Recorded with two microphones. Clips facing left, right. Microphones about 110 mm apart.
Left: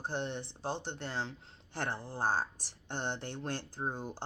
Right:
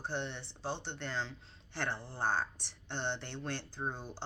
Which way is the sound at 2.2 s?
40° left (ahead or behind).